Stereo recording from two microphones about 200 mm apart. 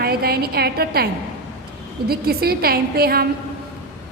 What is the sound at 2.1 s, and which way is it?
A woman's voice, 50° right (ahead or behind).